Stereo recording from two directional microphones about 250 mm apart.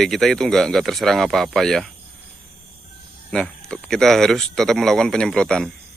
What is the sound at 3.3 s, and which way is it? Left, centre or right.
Speech, centre.